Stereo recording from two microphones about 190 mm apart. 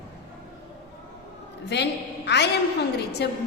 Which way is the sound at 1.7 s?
65° left (ahead or behind).